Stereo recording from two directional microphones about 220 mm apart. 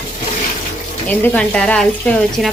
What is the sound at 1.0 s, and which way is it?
Speech, 5° left (ahead or behind).